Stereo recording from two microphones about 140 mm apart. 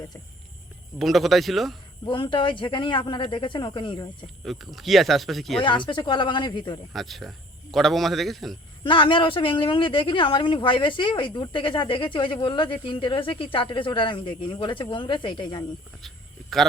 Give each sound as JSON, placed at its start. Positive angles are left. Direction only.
{"t": 0.9, "sound": "speech", "side_deg": 0}
{"t": 2.0, "sound": "speech", "side_deg": 35}
{"t": 4.4, "sound": "speech", "side_deg": 0}
{"t": 5.5, "sound": "speech", "side_deg": 35}
{"t": 6.9, "sound": "speech", "side_deg": 0}
{"t": 8.8, "sound": "speech", "side_deg": 35}
{"t": 16.0, "sound": "a sound", "side_deg": 0}